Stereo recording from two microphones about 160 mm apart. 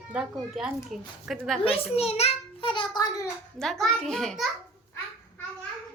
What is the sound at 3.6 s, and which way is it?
Speech, centre (ahead or behind).